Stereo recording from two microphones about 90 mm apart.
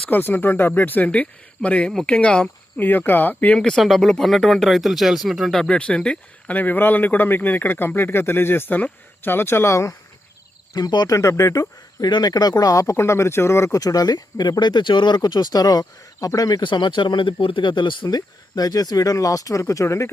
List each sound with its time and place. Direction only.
0.1 s a man's voice: 20° left (ahead or behind)
1.9 s a man's voice: 5° left (ahead or behind)
3.6 s a man's voice: 5° left (ahead or behind); by 9.9 s 35° left (ahead or behind)
10.8 s speech: 50° left (ahead or behind)
11.2 s speech: 35° left (ahead or behind)
13.7 s speech: 40° left (ahead or behind)